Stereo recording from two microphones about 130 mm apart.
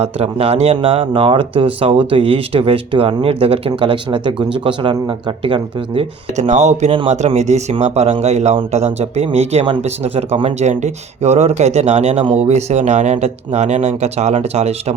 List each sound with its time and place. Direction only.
0.0 s speech: 50° right (ahead or behind)
6.3 s speech: 60° right (ahead or behind)
10.6 s speech: 60° right (ahead or behind)